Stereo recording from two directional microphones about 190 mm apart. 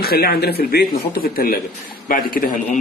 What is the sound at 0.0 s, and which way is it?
A man's voice, 55° left (ahead or behind).